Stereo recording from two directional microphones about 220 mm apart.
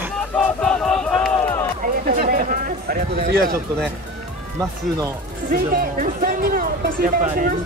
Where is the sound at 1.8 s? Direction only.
40° right (ahead or behind).